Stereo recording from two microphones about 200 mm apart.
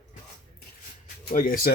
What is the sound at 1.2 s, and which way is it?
Speech, 40° left (ahead or behind).